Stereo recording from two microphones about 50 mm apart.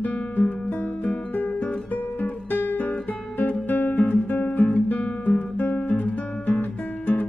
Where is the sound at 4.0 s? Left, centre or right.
Left.